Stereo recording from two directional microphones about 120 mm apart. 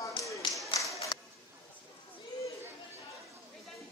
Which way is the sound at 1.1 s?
40° left (ahead or behind).